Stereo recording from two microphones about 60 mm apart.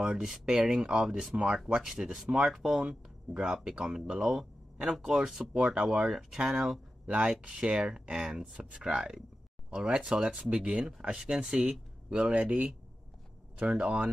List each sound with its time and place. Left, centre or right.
0.0 s speech: centre
1.3 s speech: centre
13.7 s speech: centre